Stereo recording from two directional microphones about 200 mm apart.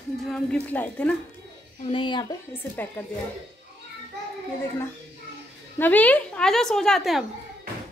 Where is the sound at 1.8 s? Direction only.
25° left (ahead or behind).